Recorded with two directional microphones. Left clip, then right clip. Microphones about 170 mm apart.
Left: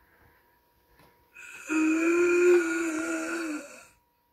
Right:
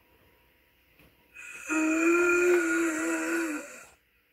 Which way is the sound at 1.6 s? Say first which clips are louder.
Even; 20° right (ahead or behind).